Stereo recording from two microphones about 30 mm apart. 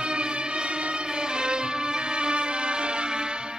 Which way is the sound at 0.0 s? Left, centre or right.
Right.